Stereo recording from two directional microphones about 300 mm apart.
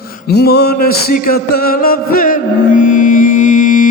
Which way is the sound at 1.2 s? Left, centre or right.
Left.